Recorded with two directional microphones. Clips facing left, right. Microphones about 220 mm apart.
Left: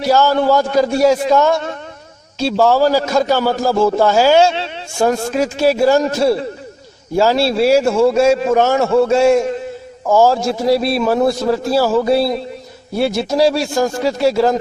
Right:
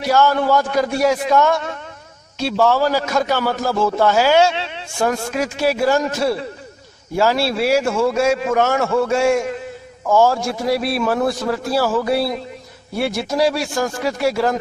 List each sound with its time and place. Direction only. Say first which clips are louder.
0.0 s a man's voice: left 3 dB; 30° left (ahead or behind)
10.1 s a man's voice: left 3 dB; 35° left (ahead or behind)
10.3 s a man's voice: left 5 dB; 25° left (ahead or behind)